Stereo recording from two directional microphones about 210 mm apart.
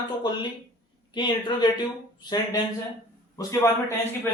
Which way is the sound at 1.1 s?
20° left (ahead or behind).